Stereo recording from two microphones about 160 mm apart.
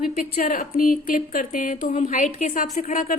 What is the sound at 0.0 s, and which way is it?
A woman's voice, 55° left (ahead or behind).